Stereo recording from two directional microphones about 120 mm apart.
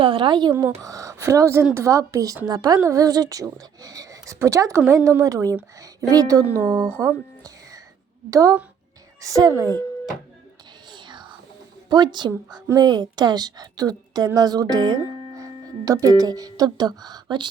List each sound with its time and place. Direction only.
0.0 s a woman's voice: 45° right (ahead or behind)
0.8 s a woman's voice: 30° right (ahead or behind)
8.3 s a woman's voice: 30° right (ahead or behind)
10.9 s music: 40° right (ahead or behind)
11.9 s a woman's voice: 40° right (ahead or behind)